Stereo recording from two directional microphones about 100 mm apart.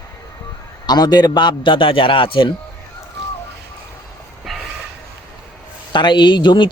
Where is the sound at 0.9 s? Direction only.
45° left (ahead or behind).